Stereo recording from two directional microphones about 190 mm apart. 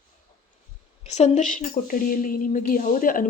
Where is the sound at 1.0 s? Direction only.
35° left (ahead or behind).